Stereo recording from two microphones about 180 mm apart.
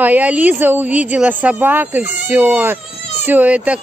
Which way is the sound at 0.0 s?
10° right (ahead or behind).